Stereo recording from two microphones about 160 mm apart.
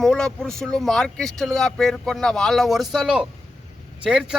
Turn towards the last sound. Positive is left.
turn(degrees=-5)  # may be behind; listen again after turning